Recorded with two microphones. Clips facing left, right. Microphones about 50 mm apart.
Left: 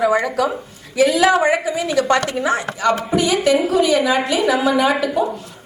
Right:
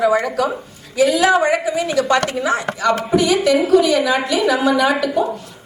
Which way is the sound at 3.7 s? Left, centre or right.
Right.